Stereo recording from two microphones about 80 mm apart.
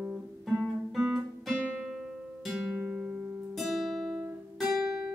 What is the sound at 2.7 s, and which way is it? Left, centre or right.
Music, centre.